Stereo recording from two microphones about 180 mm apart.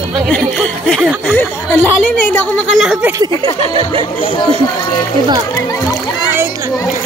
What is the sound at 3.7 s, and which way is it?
Speech, 30° right (ahead or behind).